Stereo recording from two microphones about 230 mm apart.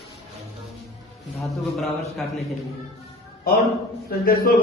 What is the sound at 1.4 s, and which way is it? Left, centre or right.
A man's voice, centre.